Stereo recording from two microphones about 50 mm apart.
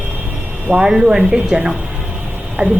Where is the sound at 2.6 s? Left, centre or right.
Right.